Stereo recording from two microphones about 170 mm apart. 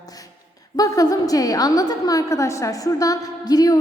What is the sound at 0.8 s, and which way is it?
A woman's voice, 20° left (ahead or behind).